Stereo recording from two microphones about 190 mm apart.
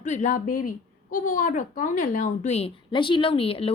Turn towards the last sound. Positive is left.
turn(degrees=30)  # may be behind; listen again after turning